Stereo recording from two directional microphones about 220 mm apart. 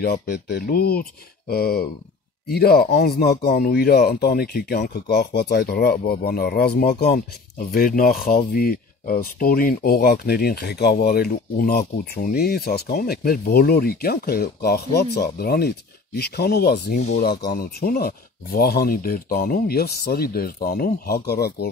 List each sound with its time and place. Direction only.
0.0 s speech: 45° left (ahead or behind)